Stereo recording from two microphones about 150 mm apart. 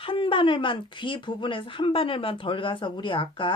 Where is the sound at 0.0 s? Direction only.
35° left (ahead or behind).